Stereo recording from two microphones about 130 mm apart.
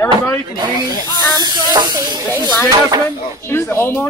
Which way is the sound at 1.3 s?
30° right (ahead or behind).